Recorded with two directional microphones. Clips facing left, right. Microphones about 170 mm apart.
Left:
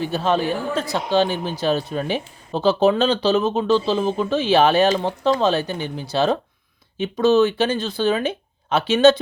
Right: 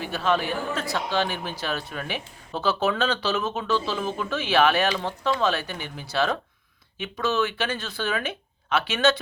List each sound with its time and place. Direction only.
0.0 s speech: 30° left (ahead or behind)
7.8 s speech: 20° left (ahead or behind)
8.0 s speech: 35° left (ahead or behind)